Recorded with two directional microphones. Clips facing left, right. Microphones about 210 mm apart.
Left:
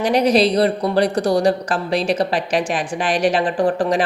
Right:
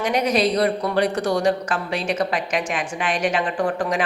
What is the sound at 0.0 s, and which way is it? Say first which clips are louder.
A woman's voice: left 5 dB; 35° left (ahead or behind).